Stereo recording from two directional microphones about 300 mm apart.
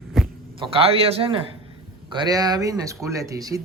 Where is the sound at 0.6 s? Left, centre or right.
Centre.